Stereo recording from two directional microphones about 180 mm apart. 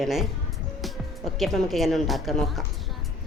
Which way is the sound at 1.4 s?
Centre (ahead or behind).